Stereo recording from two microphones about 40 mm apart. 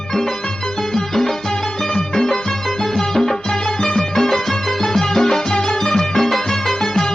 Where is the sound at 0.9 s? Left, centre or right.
Centre.